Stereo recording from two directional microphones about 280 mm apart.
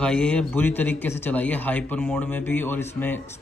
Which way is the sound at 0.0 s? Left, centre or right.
Centre.